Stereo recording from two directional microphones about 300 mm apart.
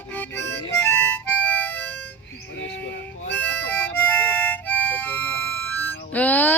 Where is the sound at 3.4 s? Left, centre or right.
Centre.